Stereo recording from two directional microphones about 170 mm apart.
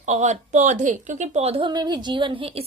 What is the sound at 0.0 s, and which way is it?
A woman's voice, 45° right (ahead or behind).